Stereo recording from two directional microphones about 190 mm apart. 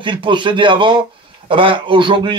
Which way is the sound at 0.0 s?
25° right (ahead or behind).